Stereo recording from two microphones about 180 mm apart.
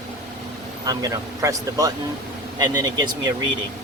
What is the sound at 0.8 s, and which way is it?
Speech, 20° right (ahead or behind).